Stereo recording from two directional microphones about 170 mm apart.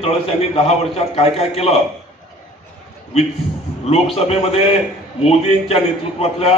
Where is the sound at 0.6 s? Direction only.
35° left (ahead or behind).